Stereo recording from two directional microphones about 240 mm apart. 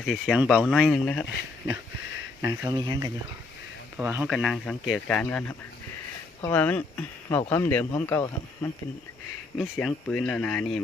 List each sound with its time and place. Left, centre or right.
0.0 s speech: centre
2.6 s speech: centre
3.9 s speech: centre